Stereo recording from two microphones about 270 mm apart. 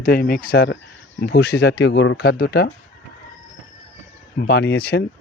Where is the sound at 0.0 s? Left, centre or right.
Left.